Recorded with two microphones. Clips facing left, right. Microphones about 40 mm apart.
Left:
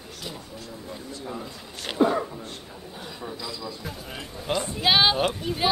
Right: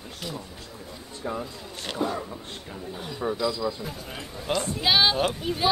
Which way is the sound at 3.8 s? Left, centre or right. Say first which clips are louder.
Even; centre.